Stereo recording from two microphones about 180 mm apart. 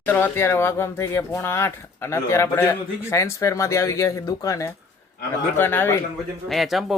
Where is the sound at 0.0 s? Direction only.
10° left (ahead or behind).